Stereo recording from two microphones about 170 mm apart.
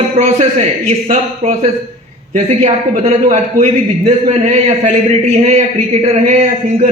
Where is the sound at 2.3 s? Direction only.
45° right (ahead or behind).